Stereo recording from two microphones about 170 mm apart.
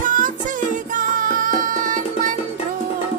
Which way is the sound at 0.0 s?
50° right (ahead or behind).